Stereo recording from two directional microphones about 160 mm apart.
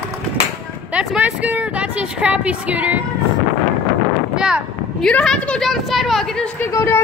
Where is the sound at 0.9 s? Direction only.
10° right (ahead or behind).